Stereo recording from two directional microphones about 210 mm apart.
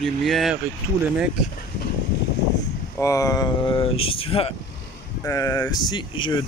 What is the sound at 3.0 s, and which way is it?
Speech, 15° left (ahead or behind).